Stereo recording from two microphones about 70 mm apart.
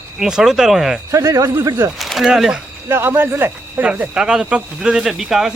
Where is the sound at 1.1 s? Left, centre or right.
Right.